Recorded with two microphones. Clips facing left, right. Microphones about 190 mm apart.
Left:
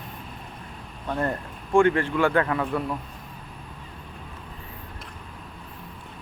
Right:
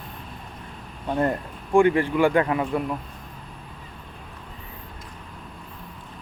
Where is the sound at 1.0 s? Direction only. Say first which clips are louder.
Right 4 dB; 20° right (ahead or behind).